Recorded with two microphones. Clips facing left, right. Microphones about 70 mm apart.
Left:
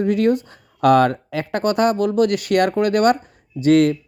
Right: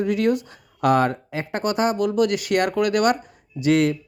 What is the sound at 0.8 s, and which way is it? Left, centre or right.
Speech, left.